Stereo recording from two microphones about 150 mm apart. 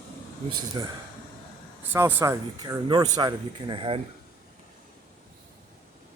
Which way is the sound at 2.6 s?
25° right (ahead or behind).